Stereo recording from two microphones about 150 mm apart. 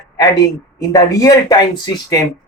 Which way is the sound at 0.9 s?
25° left (ahead or behind).